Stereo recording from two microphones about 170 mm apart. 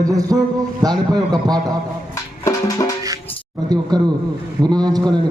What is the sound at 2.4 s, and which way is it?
Music, 20° left (ahead or behind).